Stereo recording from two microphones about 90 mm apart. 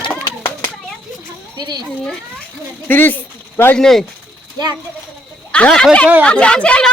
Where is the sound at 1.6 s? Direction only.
55° right (ahead or behind).